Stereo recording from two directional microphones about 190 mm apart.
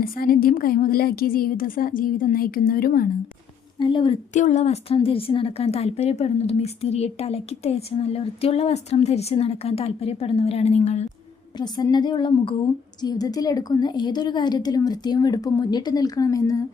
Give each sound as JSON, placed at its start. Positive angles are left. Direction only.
{"t": 0.0, "sound": "a woman's voice", "side_deg": 50}
{"t": 3.8, "sound": "a woman's voice", "side_deg": 25}
{"t": 4.4, "sound": "a woman's voice", "side_deg": 40}
{"t": 11.5, "sound": "a woman's voice", "side_deg": 20}